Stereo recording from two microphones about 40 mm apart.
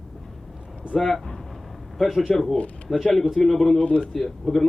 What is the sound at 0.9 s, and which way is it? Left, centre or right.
A man's voice, centre.